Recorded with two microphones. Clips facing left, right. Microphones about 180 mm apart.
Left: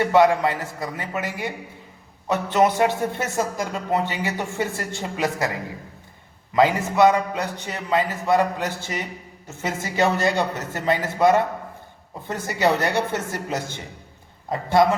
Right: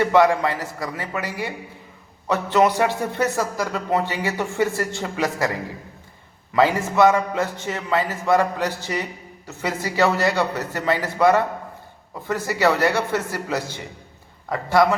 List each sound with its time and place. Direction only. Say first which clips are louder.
0.0 s a man's voice: even; 20° left (ahead or behind)
6.5 s a man's voice: even; 20° left (ahead or behind)